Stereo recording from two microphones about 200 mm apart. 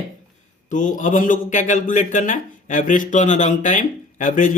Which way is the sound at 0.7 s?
40° left (ahead or behind).